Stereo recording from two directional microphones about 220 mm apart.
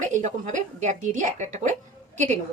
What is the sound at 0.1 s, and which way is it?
A woman's voice, 35° right (ahead or behind).